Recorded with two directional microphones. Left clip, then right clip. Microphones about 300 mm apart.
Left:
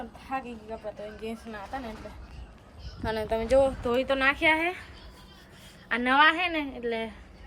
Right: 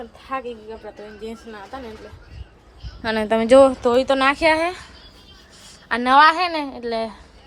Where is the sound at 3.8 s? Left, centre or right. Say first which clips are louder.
Right 8 dB; centre.